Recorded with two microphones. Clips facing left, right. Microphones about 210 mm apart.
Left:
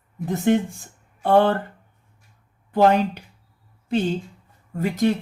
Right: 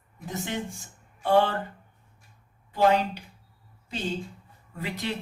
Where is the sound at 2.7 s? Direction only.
55° left (ahead or behind).